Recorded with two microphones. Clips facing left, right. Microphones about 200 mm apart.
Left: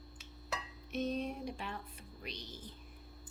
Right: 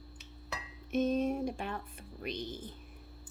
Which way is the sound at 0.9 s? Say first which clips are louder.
Right 7 dB; 50° right (ahead or behind).